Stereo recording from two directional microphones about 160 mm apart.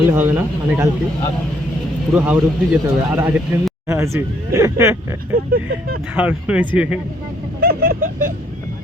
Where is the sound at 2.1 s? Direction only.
10° right (ahead or behind).